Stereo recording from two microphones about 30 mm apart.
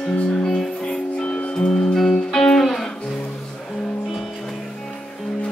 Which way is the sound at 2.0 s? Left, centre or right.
Centre.